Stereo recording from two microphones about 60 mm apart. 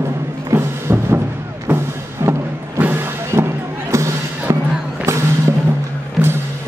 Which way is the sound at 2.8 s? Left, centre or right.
Right.